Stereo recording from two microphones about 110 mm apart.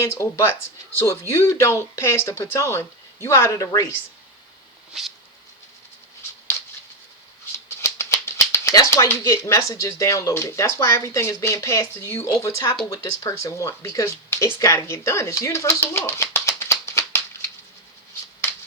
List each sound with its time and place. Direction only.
0.0 s speech: 25° left (ahead or behind)
7.8 s speech: 25° left (ahead or behind)